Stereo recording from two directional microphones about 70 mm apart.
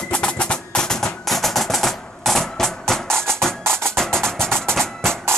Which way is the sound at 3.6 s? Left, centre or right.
Right.